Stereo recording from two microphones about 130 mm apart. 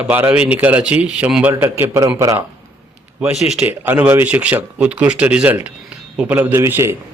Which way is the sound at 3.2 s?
10° right (ahead or behind).